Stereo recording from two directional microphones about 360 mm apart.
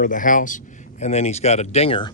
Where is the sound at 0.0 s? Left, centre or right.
Left.